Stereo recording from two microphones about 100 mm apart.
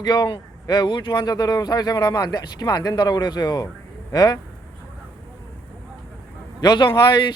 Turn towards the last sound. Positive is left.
turn(degrees=50)  # may be behind; listen again after turning